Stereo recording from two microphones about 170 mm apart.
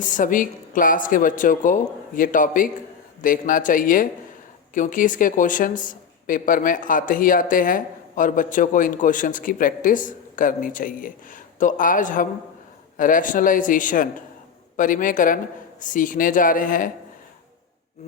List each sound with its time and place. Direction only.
0.0 s speech: 50° left (ahead or behind)